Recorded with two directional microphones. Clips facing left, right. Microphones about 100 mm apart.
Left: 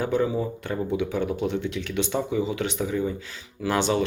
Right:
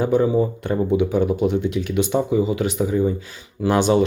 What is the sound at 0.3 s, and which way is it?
Speech, 30° right (ahead or behind).